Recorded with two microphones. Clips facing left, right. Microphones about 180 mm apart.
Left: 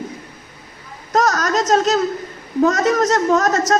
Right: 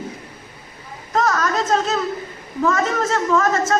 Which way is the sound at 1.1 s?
40° left (ahead or behind).